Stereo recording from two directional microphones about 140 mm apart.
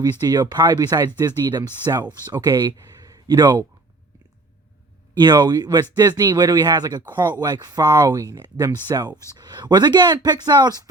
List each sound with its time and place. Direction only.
0.0 s speech: 30° right (ahead or behind)
2.6 s a sound: 30° right (ahead or behind)
3.4 s speech: 15° right (ahead or behind)
5.2 s speech: 30° right (ahead or behind)
7.0 s speech: 15° right (ahead or behind)
7.4 s speech: 30° right (ahead or behind)